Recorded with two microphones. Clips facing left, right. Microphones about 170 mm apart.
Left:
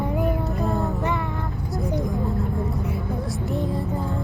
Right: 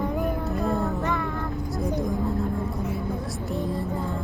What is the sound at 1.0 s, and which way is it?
Vehicle, 15° left (ahead or behind).